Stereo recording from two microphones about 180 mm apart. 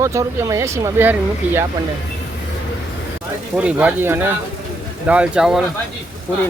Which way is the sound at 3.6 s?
5° right (ahead or behind).